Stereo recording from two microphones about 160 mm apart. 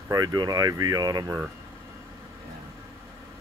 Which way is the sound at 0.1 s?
25° right (ahead or behind).